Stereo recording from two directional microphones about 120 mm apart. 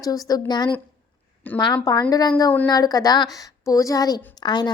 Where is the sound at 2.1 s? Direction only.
30° left (ahead or behind).